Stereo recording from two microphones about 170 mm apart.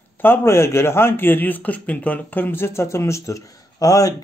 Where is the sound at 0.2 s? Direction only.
15° left (ahead or behind).